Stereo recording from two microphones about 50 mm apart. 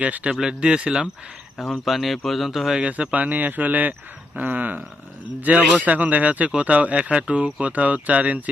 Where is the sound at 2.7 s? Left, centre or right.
Right.